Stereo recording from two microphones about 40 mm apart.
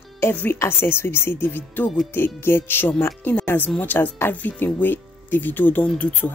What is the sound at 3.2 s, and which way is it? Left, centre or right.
Speech, left.